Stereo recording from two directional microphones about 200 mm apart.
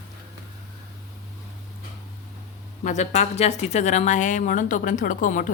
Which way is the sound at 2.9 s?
35° left (ahead or behind).